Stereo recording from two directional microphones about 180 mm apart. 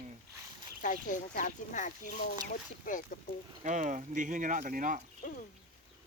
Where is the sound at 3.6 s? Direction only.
45° right (ahead or behind).